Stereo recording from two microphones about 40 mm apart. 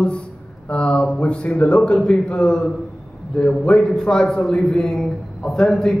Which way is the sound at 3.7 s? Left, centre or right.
Left.